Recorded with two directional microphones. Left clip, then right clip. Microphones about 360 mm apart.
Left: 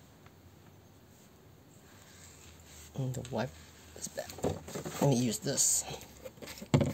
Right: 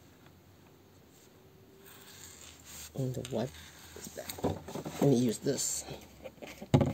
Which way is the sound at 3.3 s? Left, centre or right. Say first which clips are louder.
Even; left.